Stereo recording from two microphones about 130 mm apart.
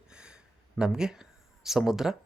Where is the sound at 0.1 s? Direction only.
5° right (ahead or behind).